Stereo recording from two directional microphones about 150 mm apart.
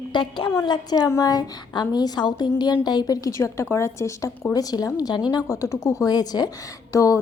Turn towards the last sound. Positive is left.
turn(degrees=20)  # may be behind; listen again after turning